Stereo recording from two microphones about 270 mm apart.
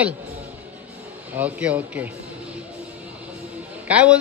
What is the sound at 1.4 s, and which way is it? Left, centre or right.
Speech, centre.